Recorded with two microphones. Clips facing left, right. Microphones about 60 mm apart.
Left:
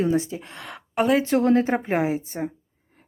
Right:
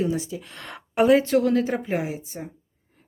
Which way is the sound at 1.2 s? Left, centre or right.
Left.